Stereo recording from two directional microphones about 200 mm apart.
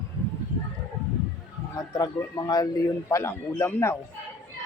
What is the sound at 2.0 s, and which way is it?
A man's voice, 15° left (ahead or behind).